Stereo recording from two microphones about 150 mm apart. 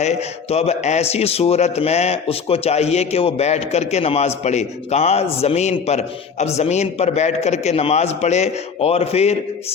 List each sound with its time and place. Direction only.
0.0 s a man's voice: 45° left (ahead or behind)